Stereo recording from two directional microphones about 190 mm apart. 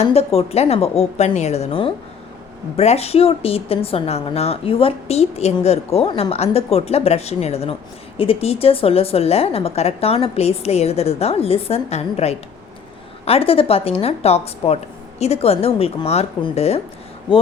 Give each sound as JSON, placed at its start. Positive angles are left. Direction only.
{"t": 0.0, "sound": "a woman's voice", "side_deg": 35}